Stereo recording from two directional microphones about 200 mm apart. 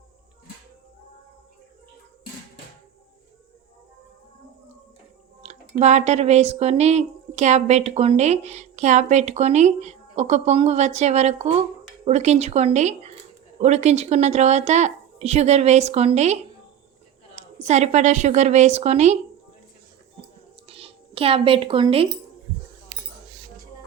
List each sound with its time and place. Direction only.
5.4 s speech: 35° right (ahead or behind)
20.7 s speech: 30° right (ahead or behind)